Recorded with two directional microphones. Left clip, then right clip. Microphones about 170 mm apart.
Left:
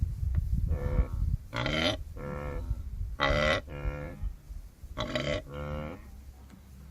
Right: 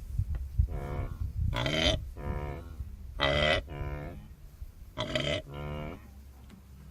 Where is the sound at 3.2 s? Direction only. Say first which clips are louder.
Even; 10° left (ahead or behind).